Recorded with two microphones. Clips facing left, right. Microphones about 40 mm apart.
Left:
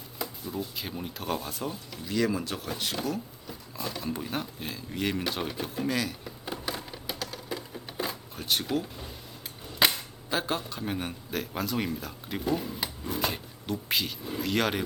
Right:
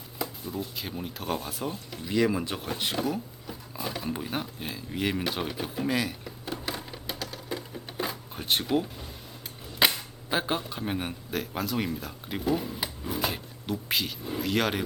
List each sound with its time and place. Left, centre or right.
0.2 s speech: centre
1.9 s speech: centre
6.7 s a sound: centre
8.7 s speech: right
9.7 s cap gun: centre
10.2 s speech: centre
11.3 s speech: centre